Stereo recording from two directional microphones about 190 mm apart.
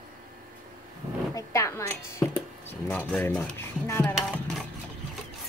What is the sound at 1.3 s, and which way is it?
Speech, 15° left (ahead or behind).